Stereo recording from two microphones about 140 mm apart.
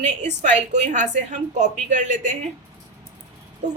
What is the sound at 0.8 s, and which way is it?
A woman's voice, 60° right (ahead or behind).